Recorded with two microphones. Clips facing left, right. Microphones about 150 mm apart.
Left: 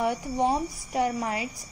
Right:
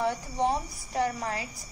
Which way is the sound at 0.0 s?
15° left (ahead or behind).